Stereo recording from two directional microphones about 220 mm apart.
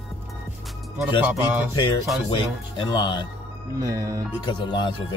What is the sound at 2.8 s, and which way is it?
Speech, 20° left (ahead or behind).